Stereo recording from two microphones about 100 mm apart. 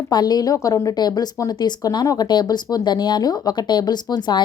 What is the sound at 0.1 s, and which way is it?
A woman's voice, 45° left (ahead or behind).